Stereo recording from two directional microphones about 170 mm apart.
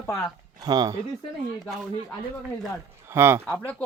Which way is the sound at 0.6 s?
25° right (ahead or behind).